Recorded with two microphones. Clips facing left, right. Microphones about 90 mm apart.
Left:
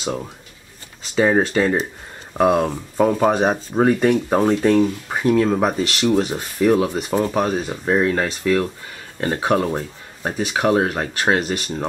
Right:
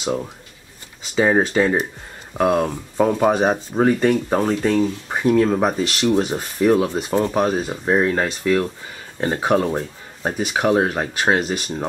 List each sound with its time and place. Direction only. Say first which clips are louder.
0.0 s speech: right 2 dB; centre (ahead or behind)
2.3 s speech: left 1 dB; 5° left (ahead or behind)